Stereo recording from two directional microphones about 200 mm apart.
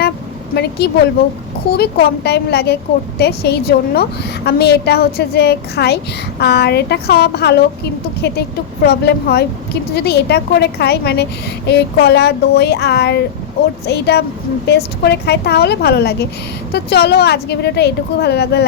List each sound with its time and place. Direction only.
0.5 s a woman's voice: 55° left (ahead or behind)